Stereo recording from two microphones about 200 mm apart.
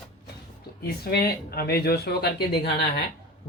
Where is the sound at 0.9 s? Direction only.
50° left (ahead or behind).